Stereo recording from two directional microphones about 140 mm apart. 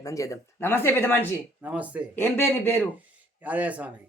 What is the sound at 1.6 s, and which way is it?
Speech, 10° right (ahead or behind).